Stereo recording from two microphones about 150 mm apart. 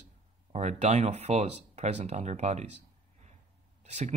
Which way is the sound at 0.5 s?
50° right (ahead or behind).